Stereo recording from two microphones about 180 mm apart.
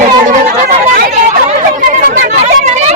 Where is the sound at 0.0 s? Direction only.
45° right (ahead or behind).